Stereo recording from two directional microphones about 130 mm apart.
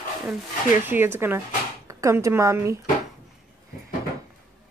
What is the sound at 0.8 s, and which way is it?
Speech, 15° right (ahead or behind).